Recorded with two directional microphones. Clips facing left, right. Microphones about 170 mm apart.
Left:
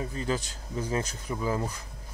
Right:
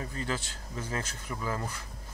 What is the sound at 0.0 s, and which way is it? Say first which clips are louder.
Speech: left 4 dB; 20° left (ahead or behind).